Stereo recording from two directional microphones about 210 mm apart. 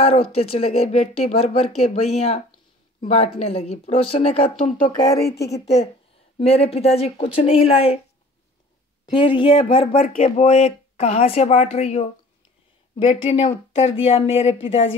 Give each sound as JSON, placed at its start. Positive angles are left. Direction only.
{"t": 0.0, "sound": "speech", "side_deg": 30}
{"t": 5.1, "sound": "speech", "side_deg": 50}
{"t": 5.5, "sound": "speech", "side_deg": 30}
{"t": 9.1, "sound": "speech", "side_deg": 25}